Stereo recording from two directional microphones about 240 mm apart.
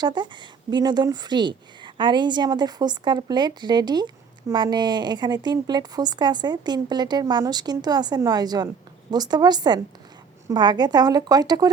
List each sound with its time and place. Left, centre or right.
0.0 s a woman's voice: centre